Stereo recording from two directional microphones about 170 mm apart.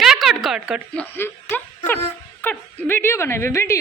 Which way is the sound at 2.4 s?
10° left (ahead or behind).